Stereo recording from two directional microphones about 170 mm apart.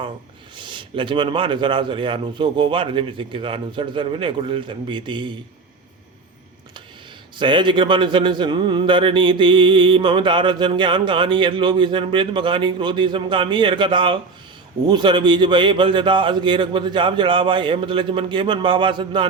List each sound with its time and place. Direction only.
0.5 s a man's voice: 30° right (ahead or behind)
7.3 s a man's voice: 30° right (ahead or behind)